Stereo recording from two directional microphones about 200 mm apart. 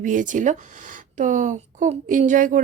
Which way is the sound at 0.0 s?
40° right (ahead or behind).